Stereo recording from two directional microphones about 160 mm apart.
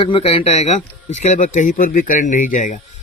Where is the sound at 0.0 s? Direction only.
35° left (ahead or behind).